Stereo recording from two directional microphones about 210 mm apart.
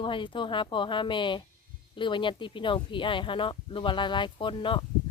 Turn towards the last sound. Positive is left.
turn(degrees=25)  # may be behind; listen again after turning